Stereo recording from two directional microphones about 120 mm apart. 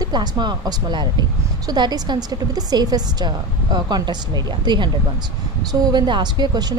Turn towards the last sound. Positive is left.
turn(degrees=-35)  # may be behind; listen again after turning